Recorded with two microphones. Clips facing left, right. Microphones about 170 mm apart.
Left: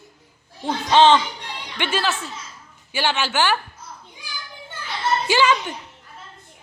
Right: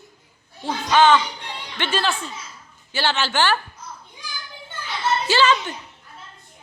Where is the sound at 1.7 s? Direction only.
10° left (ahead or behind).